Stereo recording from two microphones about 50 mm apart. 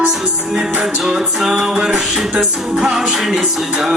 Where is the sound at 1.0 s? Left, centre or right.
Centre.